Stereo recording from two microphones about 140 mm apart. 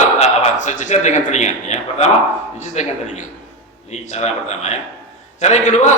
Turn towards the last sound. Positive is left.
turn(degrees=55)  # may be behind; listen again after turning